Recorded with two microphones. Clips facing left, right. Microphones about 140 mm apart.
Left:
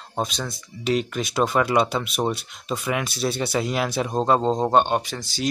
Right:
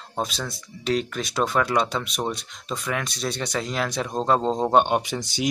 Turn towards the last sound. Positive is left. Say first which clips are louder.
# right 1 dB
turn(degrees=-20)  # may be behind; listen again after turning